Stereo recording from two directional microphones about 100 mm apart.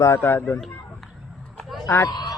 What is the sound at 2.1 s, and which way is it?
Speech, 45° left (ahead or behind).